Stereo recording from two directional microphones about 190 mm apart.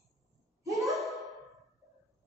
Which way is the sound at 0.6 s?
15° right (ahead or behind).